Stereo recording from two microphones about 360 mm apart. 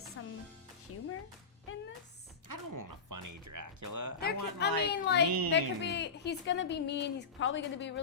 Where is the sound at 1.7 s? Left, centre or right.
Left.